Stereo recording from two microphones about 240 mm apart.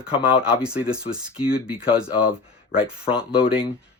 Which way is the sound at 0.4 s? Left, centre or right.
Centre.